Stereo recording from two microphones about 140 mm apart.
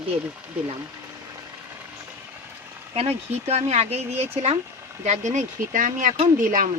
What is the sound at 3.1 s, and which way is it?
Speech, 15° right (ahead or behind).